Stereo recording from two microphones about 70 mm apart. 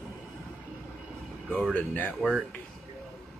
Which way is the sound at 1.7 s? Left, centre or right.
Left.